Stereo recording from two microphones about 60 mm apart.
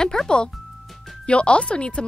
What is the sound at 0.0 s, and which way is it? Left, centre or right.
Speech, centre.